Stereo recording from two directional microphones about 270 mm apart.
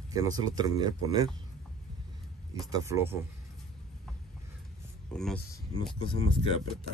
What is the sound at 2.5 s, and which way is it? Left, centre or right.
Speech, centre.